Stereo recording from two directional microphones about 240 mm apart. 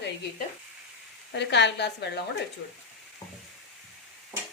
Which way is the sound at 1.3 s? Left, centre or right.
Left.